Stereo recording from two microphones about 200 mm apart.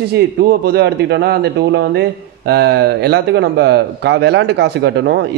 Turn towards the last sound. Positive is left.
turn(degrees=-60)  # may be behind; listen again after turning